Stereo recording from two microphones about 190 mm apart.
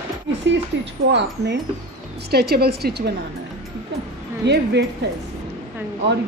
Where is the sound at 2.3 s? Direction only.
55° right (ahead or behind).